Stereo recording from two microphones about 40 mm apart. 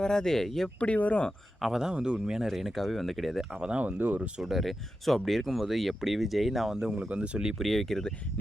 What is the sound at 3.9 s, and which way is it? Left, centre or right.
Speech, right.